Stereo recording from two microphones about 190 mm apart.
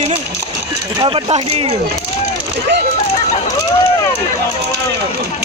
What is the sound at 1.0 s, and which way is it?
Speech, 30° right (ahead or behind).